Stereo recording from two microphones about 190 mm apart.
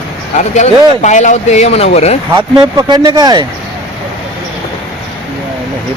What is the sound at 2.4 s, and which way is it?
Speech, 25° right (ahead or behind).